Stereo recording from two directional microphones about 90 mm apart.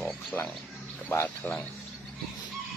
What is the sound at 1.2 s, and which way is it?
Speech, 20° left (ahead or behind).